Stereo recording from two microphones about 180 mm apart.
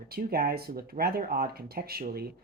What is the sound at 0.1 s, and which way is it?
Speech, 60° right (ahead or behind).